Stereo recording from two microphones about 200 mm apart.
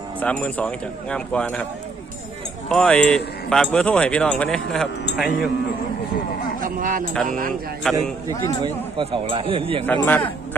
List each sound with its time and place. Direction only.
0.2 s speech: 5° left (ahead or behind)
2.6 s speech: 5° left (ahead or behind)
6.6 s a sound: 45° right (ahead or behind)
7.3 s speech: 45° right (ahead or behind)
7.9 s speech: 5° left (ahead or behind)
8.6 s a man's voice: 25° right (ahead or behind)
9.8 s speech: 10° left (ahead or behind)